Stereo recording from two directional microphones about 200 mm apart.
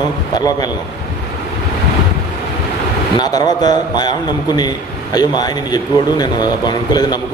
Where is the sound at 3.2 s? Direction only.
20° left (ahead or behind).